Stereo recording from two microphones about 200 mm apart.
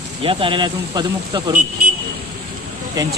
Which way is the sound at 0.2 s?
25° right (ahead or behind).